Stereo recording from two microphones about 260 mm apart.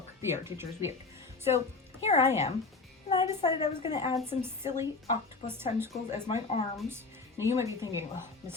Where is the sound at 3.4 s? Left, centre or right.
Centre.